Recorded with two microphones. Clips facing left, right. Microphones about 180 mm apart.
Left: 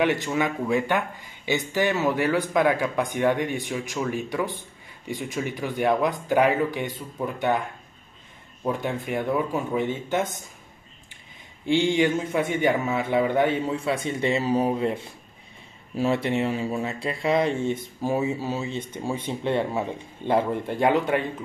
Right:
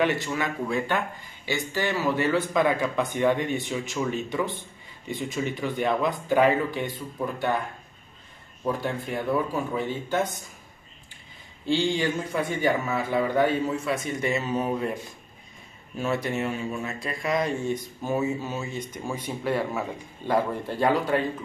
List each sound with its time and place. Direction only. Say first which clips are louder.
0.0 s speech: left 2 dB; 15° left (ahead or behind)
8.6 s a man's voice: left 1 dB; 20° left (ahead or behind)
11.6 s a man's voice: left 3 dB; 20° left (ahead or behind)